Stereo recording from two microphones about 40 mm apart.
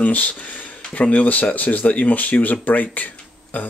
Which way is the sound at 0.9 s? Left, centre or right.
Left.